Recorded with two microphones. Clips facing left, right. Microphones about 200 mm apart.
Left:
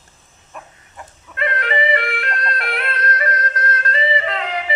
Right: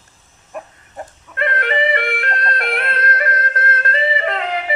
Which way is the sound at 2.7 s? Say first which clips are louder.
Right 2 dB; 55° right (ahead or behind).